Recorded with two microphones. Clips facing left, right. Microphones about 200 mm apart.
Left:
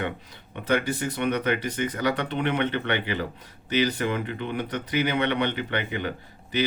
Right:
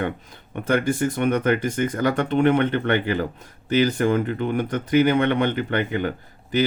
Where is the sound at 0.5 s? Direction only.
50° right (ahead or behind).